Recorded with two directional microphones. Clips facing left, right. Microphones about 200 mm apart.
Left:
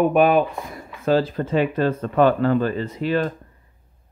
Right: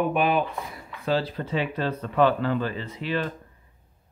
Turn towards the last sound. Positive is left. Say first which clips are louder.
# left 6 dB
turn(degrees=45)  # may be behind; listen again after turning